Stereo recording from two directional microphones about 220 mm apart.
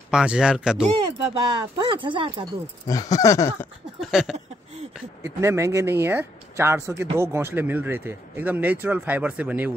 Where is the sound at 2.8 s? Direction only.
15° left (ahead or behind).